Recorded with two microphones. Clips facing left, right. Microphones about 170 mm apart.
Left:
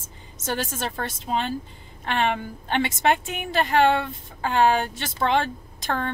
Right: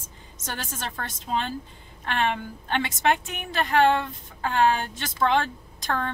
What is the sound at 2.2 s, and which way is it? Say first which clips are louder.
A woman's voice: left 2 dB; 15° left (ahead or behind).